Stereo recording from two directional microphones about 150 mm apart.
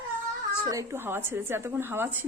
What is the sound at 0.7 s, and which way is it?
Speech, 20° right (ahead or behind).